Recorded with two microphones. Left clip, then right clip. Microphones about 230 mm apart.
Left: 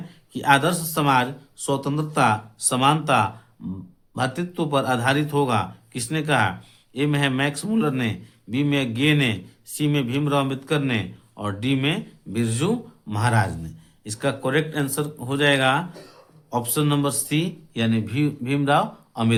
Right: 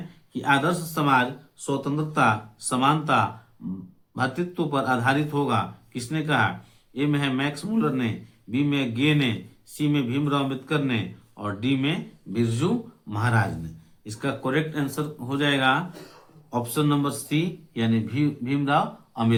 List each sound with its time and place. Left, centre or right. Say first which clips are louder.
0.3 s speech: left 4 dB; left